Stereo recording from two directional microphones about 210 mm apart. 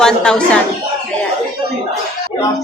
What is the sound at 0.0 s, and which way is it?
Speech, 5° left (ahead or behind).